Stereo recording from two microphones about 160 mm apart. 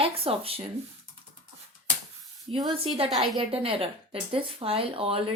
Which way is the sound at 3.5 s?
35° right (ahead or behind).